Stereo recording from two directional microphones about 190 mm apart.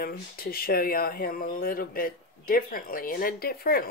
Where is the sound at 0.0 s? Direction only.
50° left (ahead or behind).